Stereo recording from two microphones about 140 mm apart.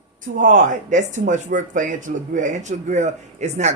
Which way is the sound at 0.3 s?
65° right (ahead or behind).